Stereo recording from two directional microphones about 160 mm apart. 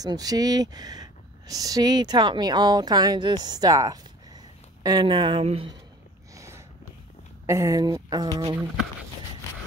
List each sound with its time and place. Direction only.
0.0 s speech: 25° right (ahead or behind)
6.3 s a sound: 20° right (ahead or behind)
7.4 s speech: 20° right (ahead or behind)